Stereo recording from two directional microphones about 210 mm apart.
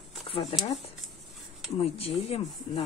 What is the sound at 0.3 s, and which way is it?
Speech, 25° left (ahead or behind).